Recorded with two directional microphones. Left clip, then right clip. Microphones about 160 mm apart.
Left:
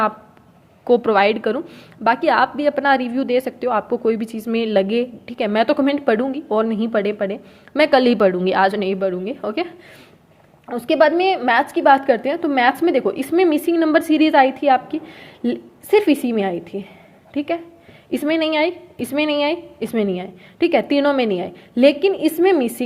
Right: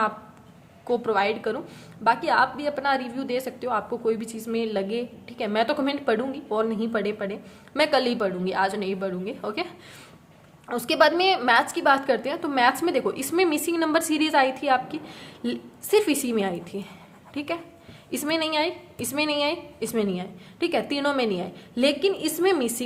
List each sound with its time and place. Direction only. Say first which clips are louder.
0.9 s a woman's voice: left 9 dB; 40° left (ahead or behind)
10.7 s a woman's voice: left 5 dB; 15° left (ahead or behind)